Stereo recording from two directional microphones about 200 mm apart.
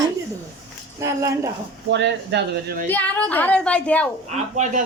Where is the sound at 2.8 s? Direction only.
10° left (ahead or behind).